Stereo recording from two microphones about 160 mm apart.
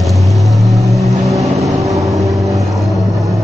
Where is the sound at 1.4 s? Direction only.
20° right (ahead or behind).